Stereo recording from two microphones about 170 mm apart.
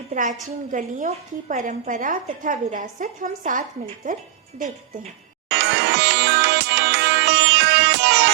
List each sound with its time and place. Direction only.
0.1 s a woman's voice: 50° right (ahead or behind)
5.5 s music: 85° right